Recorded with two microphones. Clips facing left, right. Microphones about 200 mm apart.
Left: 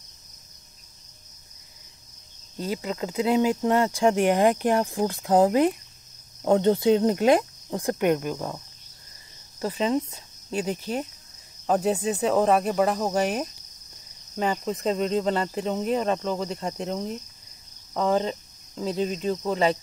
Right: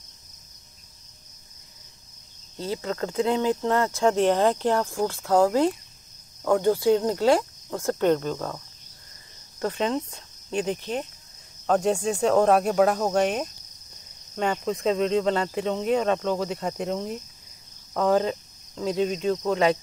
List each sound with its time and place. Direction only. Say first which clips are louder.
2.6 s speech: even; 10° left (ahead or behind)
9.6 s speech: left 1 dB; 5° left (ahead or behind)
11.6 s cricket: right 1 dB; 5° left (ahead or behind)